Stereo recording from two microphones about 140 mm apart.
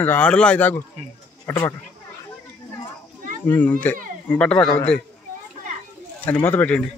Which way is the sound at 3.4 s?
10° left (ahead or behind).